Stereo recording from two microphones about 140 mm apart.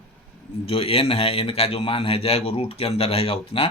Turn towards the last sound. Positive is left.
turn(degrees=40)  # may be behind; listen again after turning